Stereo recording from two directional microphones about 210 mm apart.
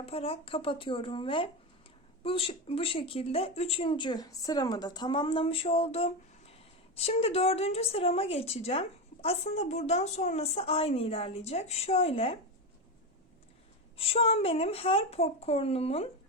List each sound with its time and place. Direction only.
0.0 s speech: 30° left (ahead or behind)
13.9 s speech: 25° left (ahead or behind)